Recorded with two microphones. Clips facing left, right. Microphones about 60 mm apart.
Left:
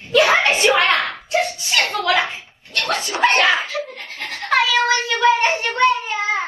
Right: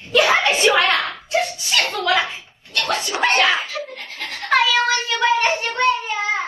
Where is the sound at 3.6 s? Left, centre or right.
Left.